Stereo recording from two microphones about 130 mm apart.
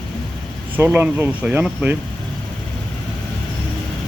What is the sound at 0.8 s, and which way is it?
Speech, 15° right (ahead or behind).